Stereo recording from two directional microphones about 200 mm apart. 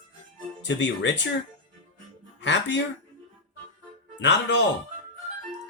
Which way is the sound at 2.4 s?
60° left (ahead or behind).